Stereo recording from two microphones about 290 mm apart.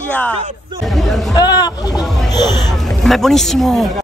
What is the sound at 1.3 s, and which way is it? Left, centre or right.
Speech, centre.